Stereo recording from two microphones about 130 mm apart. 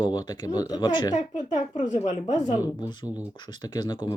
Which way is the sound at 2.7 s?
35° left (ahead or behind).